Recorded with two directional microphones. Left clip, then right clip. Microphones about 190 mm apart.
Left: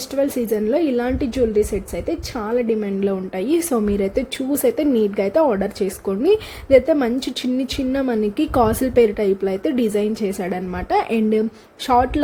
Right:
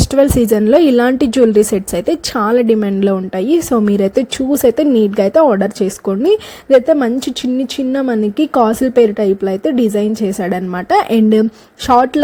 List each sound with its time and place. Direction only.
0.1 s speech: 40° right (ahead or behind)